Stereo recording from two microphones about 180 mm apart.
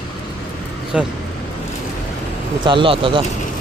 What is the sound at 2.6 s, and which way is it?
Speech, 25° right (ahead or behind).